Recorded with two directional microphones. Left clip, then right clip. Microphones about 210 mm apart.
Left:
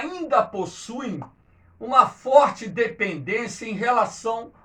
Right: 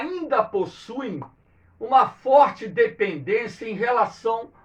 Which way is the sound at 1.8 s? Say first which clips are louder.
Even; 10° right (ahead or behind).